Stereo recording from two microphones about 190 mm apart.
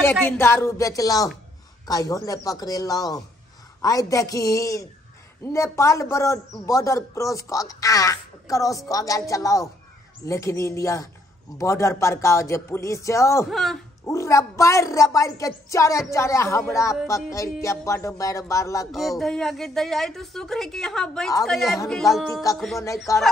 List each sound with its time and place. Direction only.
0.0 s a man's voice: 10° left (ahead or behind)
13.5 s a woman's voice: centre (ahead or behind)
14.0 s a man's voice: 15° left (ahead or behind)
18.9 s a woman's voice: centre (ahead or behind)
23.1 s a man's voice: 15° left (ahead or behind)